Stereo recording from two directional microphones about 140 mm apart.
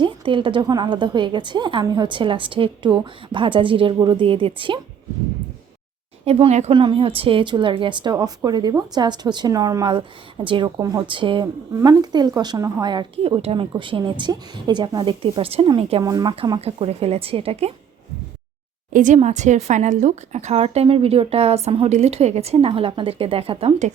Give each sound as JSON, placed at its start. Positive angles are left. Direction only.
{"t": 0.0, "sound": "a woman's voice", "side_deg": -35}
{"t": 6.2, "sound": "a woman's voice", "side_deg": -50}
{"t": 6.7, "sound": "a woman's voice", "side_deg": -35}
{"t": 16.0, "sound": "speech", "side_deg": -25}
{"t": 16.8, "sound": "a woman's voice", "side_deg": -45}
{"t": 18.9, "sound": "a woman's voice", "side_deg": -60}